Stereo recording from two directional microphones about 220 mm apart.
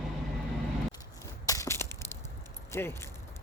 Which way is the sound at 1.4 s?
15° left (ahead or behind).